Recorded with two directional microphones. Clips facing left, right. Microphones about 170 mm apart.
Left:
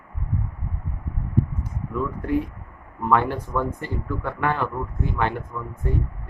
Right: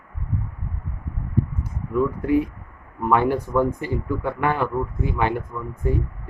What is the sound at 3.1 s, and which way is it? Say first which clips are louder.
Speech: right 3 dB; 10° right (ahead or behind).